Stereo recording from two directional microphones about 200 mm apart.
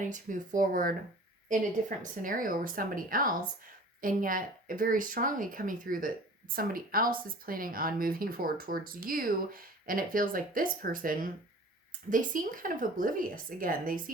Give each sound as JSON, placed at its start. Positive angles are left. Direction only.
{"t": 0.0, "sound": "speech", "side_deg": -40}